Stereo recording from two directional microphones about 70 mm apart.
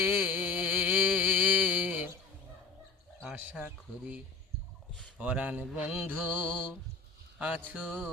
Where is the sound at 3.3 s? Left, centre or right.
Right.